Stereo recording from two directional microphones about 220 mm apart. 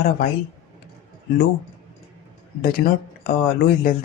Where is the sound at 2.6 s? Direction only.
40° left (ahead or behind).